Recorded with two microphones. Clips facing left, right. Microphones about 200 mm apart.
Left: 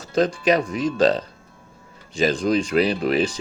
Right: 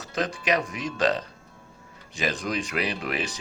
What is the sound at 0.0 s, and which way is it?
Speech, 30° left (ahead or behind).